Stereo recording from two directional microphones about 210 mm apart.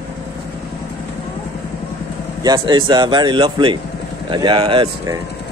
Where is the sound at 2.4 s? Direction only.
20° right (ahead or behind).